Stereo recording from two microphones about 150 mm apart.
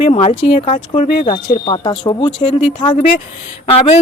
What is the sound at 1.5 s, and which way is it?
A woman's voice, 35° left (ahead or behind).